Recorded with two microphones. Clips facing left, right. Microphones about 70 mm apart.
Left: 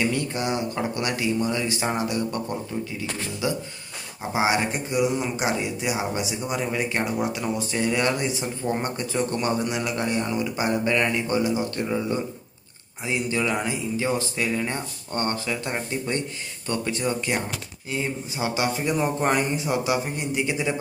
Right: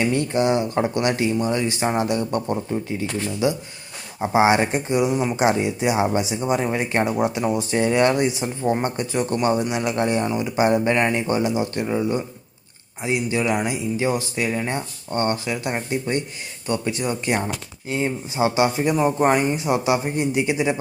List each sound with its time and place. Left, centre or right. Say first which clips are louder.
0.0 s speech: right 5 dB; right
9.9 s speech: right 4 dB; right
17.8 s speech: right 5 dB; right